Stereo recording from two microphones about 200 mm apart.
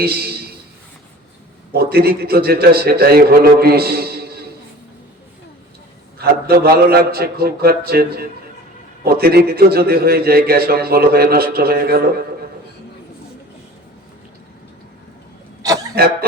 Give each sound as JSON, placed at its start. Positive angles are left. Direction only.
{"t": 0.0, "sound": "a man's voice", "side_deg": -50}
{"t": 1.7, "sound": "a man's voice", "side_deg": -50}
{"t": 6.1, "sound": "a man's voice", "side_deg": -50}
{"t": 15.6, "sound": "throat clearing", "side_deg": -20}